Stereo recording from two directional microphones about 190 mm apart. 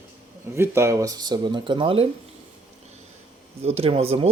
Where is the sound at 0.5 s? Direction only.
15° right (ahead or behind).